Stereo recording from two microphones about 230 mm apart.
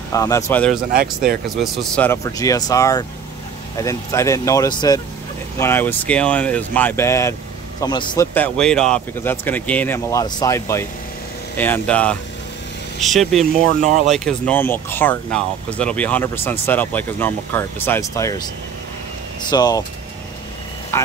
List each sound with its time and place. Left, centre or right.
0.1 s speech: centre
8.4 s speech: centre
13.8 s speech: right
14.1 s speech: centre
19.5 s speech: centre
20.9 s speech: centre